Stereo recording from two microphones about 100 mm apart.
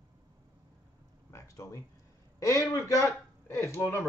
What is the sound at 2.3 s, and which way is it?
A man's voice, 35° left (ahead or behind).